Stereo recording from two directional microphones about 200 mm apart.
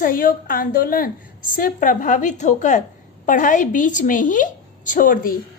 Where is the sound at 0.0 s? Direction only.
45° left (ahead or behind).